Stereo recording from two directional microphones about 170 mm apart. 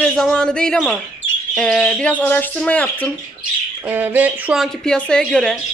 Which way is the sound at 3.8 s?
10° right (ahead or behind).